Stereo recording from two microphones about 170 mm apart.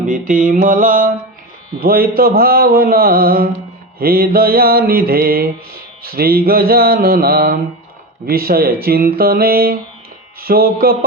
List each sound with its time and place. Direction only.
0.1 s mantra: 55° right (ahead or behind)